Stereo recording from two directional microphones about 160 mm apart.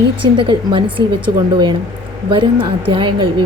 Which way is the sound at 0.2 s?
30° right (ahead or behind).